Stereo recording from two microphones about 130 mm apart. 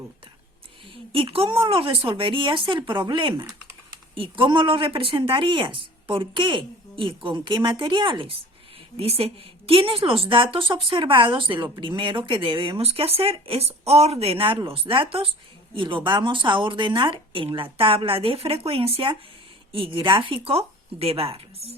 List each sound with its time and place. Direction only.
0.9 s a woman's voice: 40° right (ahead or behind)